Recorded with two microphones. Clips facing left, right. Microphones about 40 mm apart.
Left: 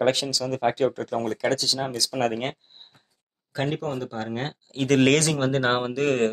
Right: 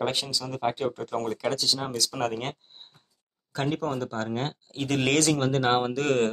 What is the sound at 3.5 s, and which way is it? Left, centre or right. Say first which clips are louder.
Speech: left 1 dB; centre.